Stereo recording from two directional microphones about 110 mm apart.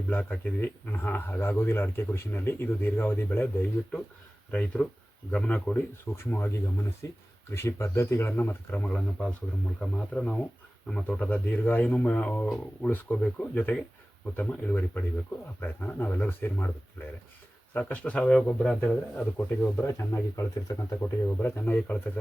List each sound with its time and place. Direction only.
0.1 s speech: 15° left (ahead or behind)